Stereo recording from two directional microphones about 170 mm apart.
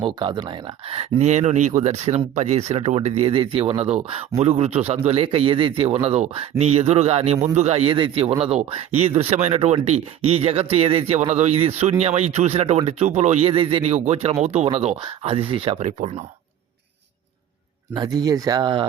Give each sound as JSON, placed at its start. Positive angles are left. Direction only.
{"t": 0.0, "sound": "speech", "side_deg": -25}
{"t": 15.9, "sound": "speech", "side_deg": -45}
{"t": 17.9, "sound": "speech", "side_deg": -25}